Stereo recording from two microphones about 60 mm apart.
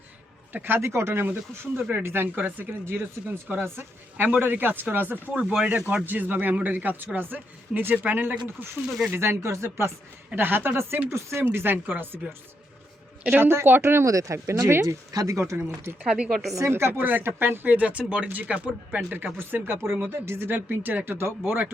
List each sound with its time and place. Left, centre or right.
0.5 s speech: right
0.8 s speech: right
5.3 s speech: centre
5.9 s speech: right
10.3 s speech: right
13.3 s speech: right
14.0 s speech: right
14.3 s speech: right
15.1 s speech: right
16.0 s speech: centre
16.3 s a woman's voice: centre
16.6 s speech: right
17.0 s speech: right